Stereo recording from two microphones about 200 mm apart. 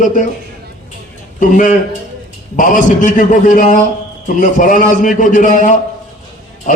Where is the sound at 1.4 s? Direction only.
40° left (ahead or behind).